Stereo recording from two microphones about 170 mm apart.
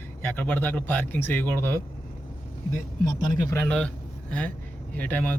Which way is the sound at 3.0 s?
20° left (ahead or behind).